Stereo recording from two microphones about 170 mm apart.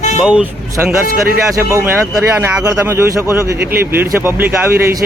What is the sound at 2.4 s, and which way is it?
Speech, 15° right (ahead or behind).